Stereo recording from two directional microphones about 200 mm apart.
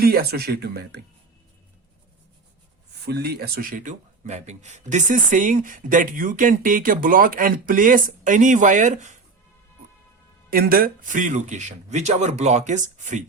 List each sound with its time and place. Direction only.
0.0 s speech: 50° right (ahead or behind)
3.1 s speech: 55° right (ahead or behind); by 9.0 s 35° right (ahead or behind)
10.5 s speech: 50° right (ahead or behind)